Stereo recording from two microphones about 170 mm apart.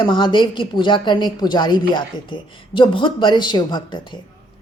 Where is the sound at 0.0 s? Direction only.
30° left (ahead or behind).